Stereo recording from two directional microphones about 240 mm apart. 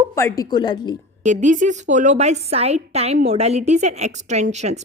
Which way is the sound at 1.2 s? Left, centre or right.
Right.